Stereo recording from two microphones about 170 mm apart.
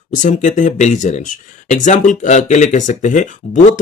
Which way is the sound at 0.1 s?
45° left (ahead or behind).